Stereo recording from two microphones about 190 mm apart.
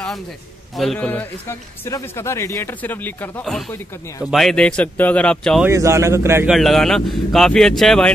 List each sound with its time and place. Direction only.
0.7 s a man's voice: 5° left (ahead or behind)
5.7 s a man's voice: 15° right (ahead or behind)
6.5 s speech: centre (ahead or behind)